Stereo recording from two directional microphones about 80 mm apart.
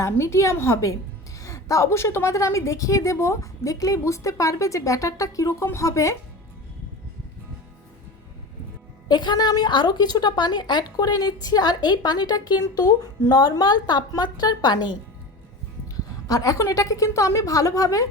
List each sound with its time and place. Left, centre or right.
0.0 s a woman's voice: left
9.0 s a woman's voice: left
16.2 s a woman's voice: left